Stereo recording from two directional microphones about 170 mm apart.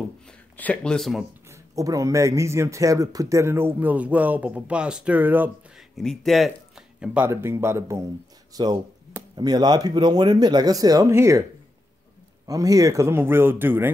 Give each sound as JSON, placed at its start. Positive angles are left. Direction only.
{"t": 0.6, "sound": "speech", "side_deg": 5}
{"t": 1.5, "sound": "speech", "side_deg": -20}
{"t": 5.9, "sound": "speech", "side_deg": 0}
{"t": 7.0, "sound": "speech", "side_deg": -10}
{"t": 12.4, "sound": "speech", "side_deg": -20}